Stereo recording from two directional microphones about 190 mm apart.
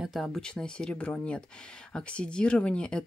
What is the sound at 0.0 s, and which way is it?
Speech, centre (ahead or behind).